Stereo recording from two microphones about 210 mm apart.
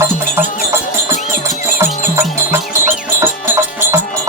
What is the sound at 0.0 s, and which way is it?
Music, 15° right (ahead or behind).